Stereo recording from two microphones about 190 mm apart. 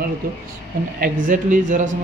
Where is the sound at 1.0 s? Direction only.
45° right (ahead or behind).